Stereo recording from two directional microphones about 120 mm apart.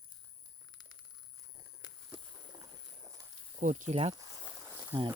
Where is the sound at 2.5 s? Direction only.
35° right (ahead or behind).